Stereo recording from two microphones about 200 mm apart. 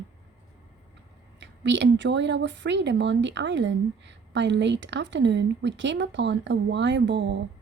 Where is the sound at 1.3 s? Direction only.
60° right (ahead or behind).